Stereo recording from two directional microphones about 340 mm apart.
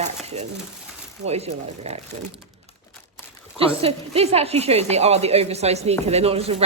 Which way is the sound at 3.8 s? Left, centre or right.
Centre.